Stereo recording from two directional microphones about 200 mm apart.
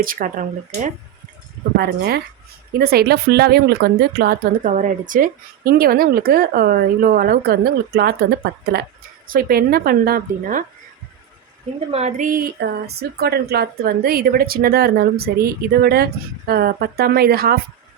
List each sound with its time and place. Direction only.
0.0 s speech: 45° right (ahead or behind)
1.8 s speech: 55° right (ahead or behind)
11.9 s speech: 35° right (ahead or behind); by 17.6 s 50° right (ahead or behind)